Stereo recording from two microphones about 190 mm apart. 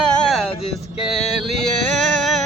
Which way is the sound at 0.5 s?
30° left (ahead or behind).